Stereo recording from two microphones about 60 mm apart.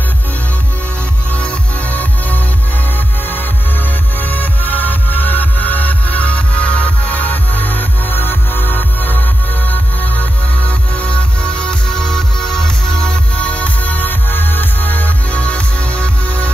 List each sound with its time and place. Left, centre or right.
1.3 s music: left
4.2 s music: left